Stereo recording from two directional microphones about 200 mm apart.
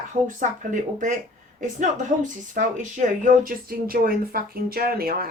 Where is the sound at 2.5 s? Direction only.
40° right (ahead or behind).